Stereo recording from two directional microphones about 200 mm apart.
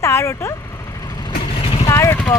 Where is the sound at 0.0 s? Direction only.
15° left (ahead or behind).